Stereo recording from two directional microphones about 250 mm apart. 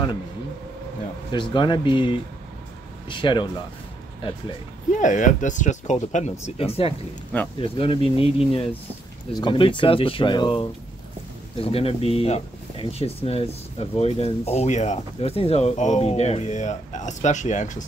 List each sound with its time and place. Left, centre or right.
1.3 s speech: centre
4.9 s speech: left